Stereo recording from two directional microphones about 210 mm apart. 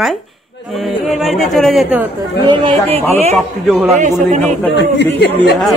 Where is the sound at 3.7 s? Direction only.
Centre (ahead or behind).